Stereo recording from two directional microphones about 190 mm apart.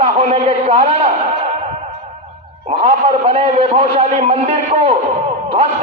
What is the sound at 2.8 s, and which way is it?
A man's voice, 30° right (ahead or behind).